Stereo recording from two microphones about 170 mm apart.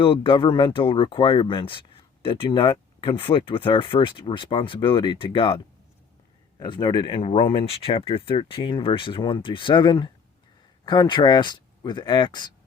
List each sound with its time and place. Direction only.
0.0 s speech: 30° left (ahead or behind)
6.6 s speech: 25° left (ahead or behind)